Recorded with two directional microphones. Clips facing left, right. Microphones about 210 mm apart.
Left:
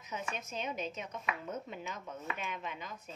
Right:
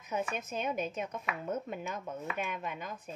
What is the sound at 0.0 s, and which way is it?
Speech, 55° right (ahead or behind).